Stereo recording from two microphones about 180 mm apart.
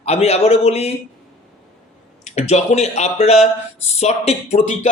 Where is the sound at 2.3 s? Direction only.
35° left (ahead or behind).